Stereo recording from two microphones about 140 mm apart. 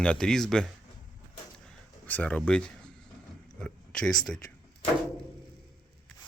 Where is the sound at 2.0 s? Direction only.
10° left (ahead or behind).